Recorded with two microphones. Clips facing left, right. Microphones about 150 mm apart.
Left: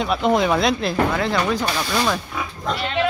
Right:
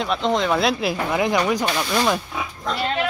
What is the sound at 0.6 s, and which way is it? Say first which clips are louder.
Speech: left 2 dB; 5° right (ahead or behind).